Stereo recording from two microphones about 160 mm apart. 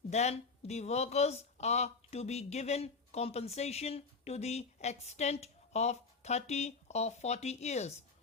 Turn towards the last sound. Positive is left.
turn(degrees=45)  # may be behind; listen again after turning